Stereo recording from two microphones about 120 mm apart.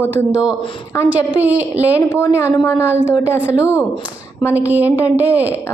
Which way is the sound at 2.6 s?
25° left (ahead or behind).